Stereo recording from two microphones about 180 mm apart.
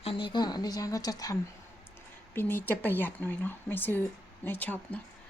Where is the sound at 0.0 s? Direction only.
30° left (ahead or behind).